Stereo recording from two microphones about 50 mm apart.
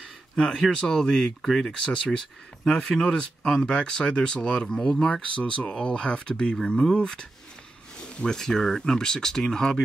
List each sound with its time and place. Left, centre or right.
0.4 s speech: centre